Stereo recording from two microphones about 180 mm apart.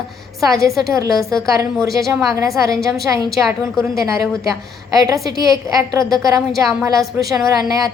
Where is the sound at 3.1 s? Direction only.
10° right (ahead or behind).